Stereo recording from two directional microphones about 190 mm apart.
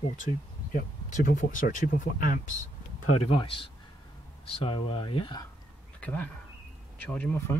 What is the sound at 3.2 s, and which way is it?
Speech, 30° left (ahead or behind).